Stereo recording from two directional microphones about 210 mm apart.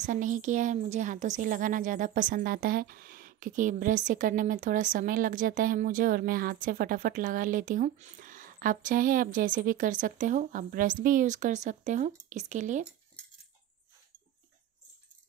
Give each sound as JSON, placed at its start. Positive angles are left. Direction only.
{"t": 0.0, "sound": "speech", "side_deg": -35}